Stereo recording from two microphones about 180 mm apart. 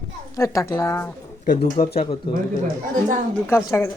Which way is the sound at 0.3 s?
15° left (ahead or behind).